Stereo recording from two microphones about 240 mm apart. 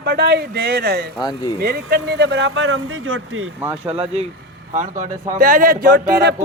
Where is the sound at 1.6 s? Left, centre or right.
Right.